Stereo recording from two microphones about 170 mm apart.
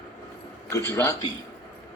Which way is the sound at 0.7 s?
15° left (ahead or behind).